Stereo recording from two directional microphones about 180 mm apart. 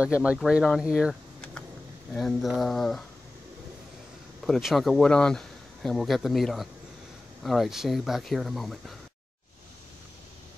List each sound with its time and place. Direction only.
0.0 s speech: 5° right (ahead or behind)
4.5 s speech: centre (ahead or behind)